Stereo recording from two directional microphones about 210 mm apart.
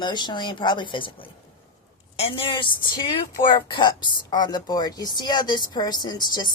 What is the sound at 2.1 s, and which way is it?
Speech, 25° left (ahead or behind).